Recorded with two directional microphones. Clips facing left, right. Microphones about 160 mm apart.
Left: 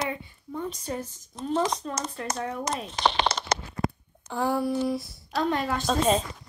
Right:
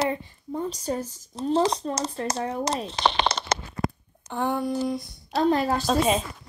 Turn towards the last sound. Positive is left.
turn(degrees=-5)  # may be behind; listen again after turning